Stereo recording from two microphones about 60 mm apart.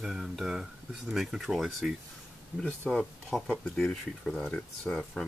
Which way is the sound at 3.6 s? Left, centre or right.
Centre.